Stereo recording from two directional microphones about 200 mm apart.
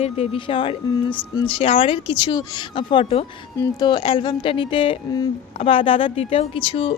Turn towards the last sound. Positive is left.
turn(degrees=25)  # may be behind; listen again after turning